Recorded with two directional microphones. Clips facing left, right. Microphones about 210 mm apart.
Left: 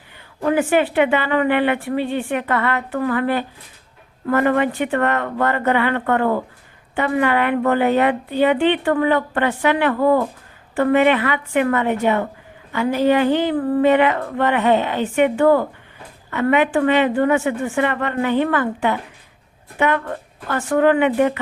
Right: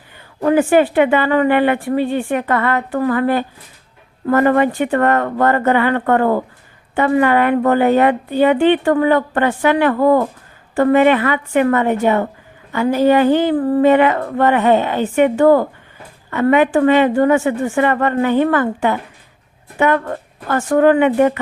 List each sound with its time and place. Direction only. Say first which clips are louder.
0.5 s a woman's voice: right 4 dB; 45° right (ahead or behind)
13.6 s a sound: right 3 dB; 30° right (ahead or behind)
13.8 s a woman's voice: right 3 dB; 45° right (ahead or behind)